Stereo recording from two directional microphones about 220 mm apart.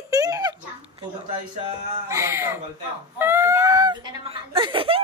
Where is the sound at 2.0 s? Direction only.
10° right (ahead or behind).